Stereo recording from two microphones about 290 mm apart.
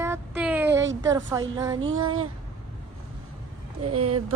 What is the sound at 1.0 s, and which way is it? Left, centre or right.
Speech, centre.